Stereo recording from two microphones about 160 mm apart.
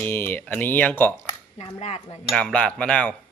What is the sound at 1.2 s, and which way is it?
Speech, 40° left (ahead or behind).